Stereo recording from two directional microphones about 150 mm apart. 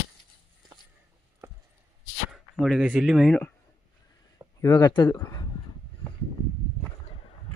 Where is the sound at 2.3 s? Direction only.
Centre (ahead or behind).